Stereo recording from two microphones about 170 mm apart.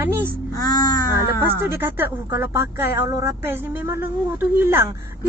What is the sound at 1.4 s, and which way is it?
A woman's voice, 10° right (ahead or behind).